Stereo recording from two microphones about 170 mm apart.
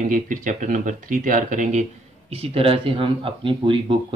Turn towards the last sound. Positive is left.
turn(degrees=-30)  # may be behind; listen again after turning